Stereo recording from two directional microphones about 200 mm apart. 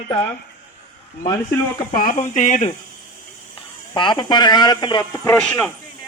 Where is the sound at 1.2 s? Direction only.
20° left (ahead or behind).